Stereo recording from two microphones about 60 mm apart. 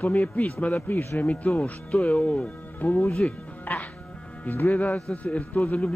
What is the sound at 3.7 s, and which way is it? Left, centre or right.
Music, left.